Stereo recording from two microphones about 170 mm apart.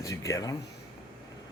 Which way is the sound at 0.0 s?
20° left (ahead or behind).